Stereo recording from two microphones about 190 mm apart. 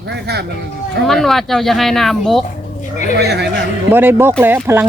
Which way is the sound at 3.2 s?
60° right (ahead or behind).